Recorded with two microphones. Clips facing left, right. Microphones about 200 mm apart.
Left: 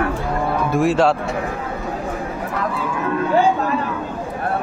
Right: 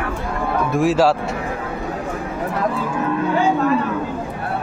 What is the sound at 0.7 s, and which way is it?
Speech, centre (ahead or behind).